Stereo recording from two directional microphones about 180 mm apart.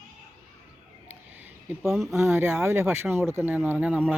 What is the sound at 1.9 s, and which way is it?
Speech, centre (ahead or behind).